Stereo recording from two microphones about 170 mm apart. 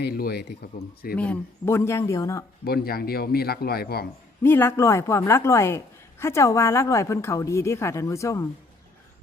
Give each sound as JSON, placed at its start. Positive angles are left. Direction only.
{"t": 0.0, "sound": "speech", "side_deg": 65}
{"t": 1.1, "sound": "a woman's voice", "side_deg": 10}
{"t": 2.6, "sound": "speech", "side_deg": 65}
{"t": 4.4, "sound": "a woman's voice", "side_deg": 15}